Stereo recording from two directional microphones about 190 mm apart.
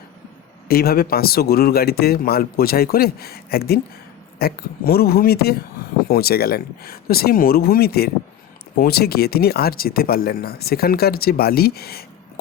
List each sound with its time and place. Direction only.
0.7 s a man's voice: 55° left (ahead or behind)